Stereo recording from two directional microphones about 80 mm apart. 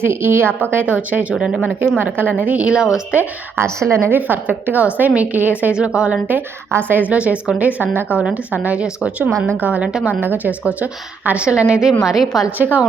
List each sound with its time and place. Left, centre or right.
0.0 s a woman's voice: right; by 2.8 s centre
2.8 s speech: left
3.6 s a woman's voice: right
4.3 s a woman's voice: right
6.2 s a woman's voice: right
10.2 s a woman's voice: right; by 12.4 s centre
12.5 s a woman's voice: right